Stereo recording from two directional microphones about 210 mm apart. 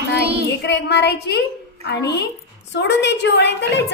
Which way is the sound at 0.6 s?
55° left (ahead or behind).